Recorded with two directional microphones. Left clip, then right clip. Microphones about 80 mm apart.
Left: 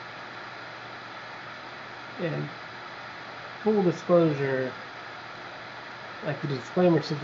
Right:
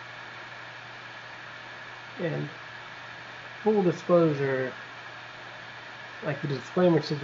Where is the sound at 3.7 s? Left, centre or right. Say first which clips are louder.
Even; left.